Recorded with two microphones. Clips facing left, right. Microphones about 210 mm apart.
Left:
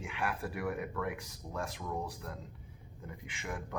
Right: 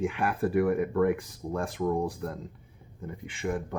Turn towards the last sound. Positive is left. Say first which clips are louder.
# right 9 dB
turn(degrees=-35)  # may be behind; listen again after turning